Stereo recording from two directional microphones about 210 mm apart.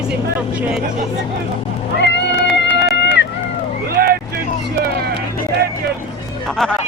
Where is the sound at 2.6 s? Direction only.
55° left (ahead or behind).